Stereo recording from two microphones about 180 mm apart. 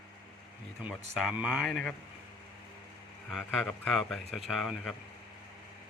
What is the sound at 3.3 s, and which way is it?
Speech, centre (ahead or behind).